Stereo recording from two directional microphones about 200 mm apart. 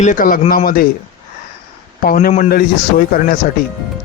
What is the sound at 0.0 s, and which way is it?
Speech, 40° left (ahead or behind).